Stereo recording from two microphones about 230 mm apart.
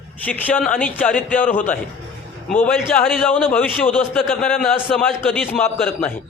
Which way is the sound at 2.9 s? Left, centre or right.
Centre.